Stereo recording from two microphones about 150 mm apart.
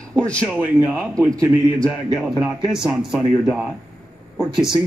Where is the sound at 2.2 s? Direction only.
5° right (ahead or behind).